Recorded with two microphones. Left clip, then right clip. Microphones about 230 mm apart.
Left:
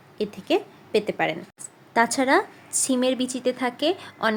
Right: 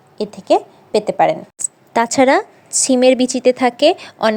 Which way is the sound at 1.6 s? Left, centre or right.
Right.